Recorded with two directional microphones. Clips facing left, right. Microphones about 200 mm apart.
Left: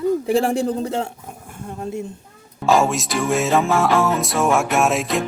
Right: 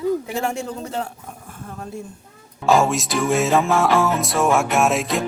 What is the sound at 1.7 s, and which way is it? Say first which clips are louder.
Speech: left 5 dB; 20° left (ahead or behind).